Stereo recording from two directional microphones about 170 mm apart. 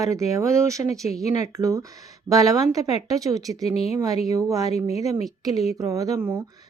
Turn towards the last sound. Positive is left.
turn(degrees=-15)  # may be behind; listen again after turning